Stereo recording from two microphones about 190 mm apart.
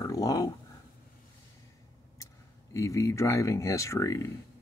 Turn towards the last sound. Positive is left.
turn(degrees=15)  # may be behind; listen again after turning